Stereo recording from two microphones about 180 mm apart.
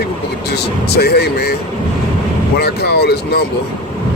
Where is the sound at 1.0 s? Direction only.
60° left (ahead or behind).